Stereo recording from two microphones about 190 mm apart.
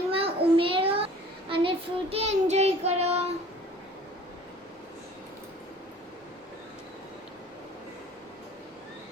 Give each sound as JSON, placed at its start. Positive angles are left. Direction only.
{"t": 0.1, "sound": "child singing", "side_deg": -30}